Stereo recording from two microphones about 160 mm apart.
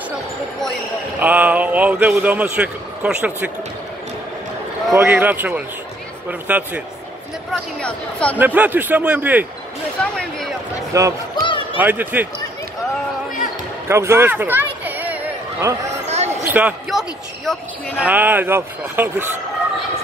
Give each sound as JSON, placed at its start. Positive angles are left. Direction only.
{"t": 1.2, "sound": "a man's voice", "side_deg": -10}
{"t": 4.9, "sound": "a man's voice", "side_deg": -15}
{"t": 7.8, "sound": "speech", "side_deg": 5}
{"t": 8.4, "sound": "a man's voice", "side_deg": -10}
{"t": 10.0, "sound": "speech", "side_deg": 5}
{"t": 10.9, "sound": "speech", "side_deg": -20}
{"t": 11.4, "sound": "basketball bounce", "side_deg": 30}
{"t": 11.8, "sound": "a man's voice", "side_deg": -10}
{"t": 13.8, "sound": "a sound", "side_deg": -15}
{"t": 16.4, "sound": "a man's voice", "side_deg": -10}